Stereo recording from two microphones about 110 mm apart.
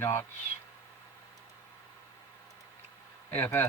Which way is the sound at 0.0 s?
25° left (ahead or behind).